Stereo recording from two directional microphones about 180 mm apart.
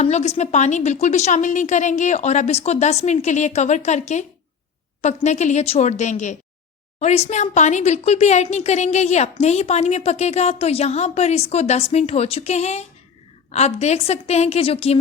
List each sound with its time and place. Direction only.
0.0 s a woman's voice: 40° left (ahead or behind)